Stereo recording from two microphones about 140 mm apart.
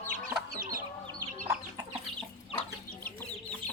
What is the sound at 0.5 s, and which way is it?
Chicken, 90° right.